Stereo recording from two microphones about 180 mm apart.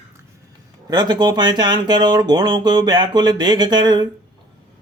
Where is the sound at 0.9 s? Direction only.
25° right (ahead or behind).